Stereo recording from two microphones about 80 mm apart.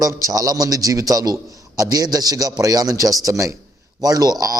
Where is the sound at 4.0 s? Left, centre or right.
Right.